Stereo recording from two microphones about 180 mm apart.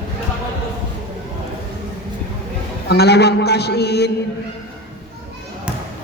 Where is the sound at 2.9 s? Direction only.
65° left (ahead or behind).